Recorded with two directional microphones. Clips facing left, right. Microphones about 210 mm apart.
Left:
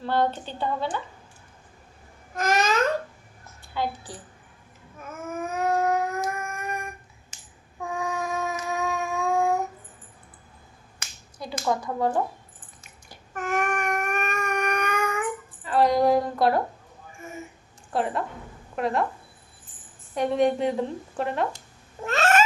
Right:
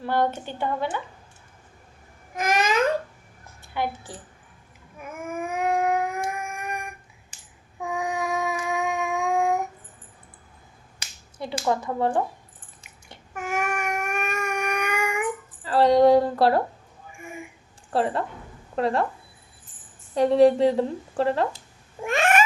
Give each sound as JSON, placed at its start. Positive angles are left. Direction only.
{"t": 0.0, "sound": "a woman's voice", "side_deg": -15}
{"t": 2.3, "sound": "babbling", "side_deg": -10}
{"t": 4.9, "sound": "dog", "side_deg": -15}
{"t": 7.8, "sound": "a sound", "side_deg": -15}
{"t": 11.3, "sound": "finger snapping", "side_deg": -25}
{"t": 11.8, "sound": "speech", "side_deg": -25}
{"t": 13.3, "sound": "a sound", "side_deg": -10}
{"t": 15.6, "sound": "a sound", "side_deg": -30}
{"t": 17.1, "sound": "a sound", "side_deg": -15}
{"t": 17.9, "sound": "a woman's voice", "side_deg": -30}
{"t": 20.1, "sound": "a woman's voice", "side_deg": -35}
{"t": 22.0, "sound": "cat", "side_deg": -15}